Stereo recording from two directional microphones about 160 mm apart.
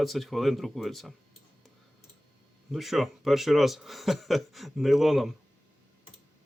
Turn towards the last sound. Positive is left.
turn(degrees=0)  # may be behind; listen again after turning